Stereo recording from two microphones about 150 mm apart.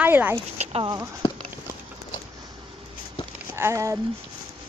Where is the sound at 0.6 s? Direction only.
40° right (ahead or behind).